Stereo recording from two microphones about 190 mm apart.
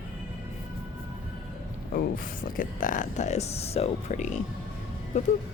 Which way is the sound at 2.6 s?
45° left (ahead or behind).